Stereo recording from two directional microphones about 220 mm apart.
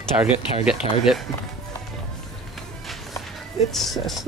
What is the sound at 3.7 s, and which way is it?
Speech, centre (ahead or behind).